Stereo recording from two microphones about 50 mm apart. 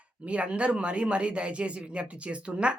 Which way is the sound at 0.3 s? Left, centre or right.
Right.